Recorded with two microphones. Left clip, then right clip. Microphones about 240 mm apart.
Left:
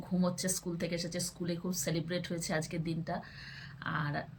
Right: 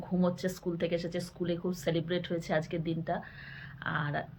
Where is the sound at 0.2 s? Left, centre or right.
Centre.